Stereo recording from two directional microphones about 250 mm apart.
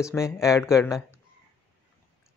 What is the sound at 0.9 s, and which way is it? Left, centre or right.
Speech, centre.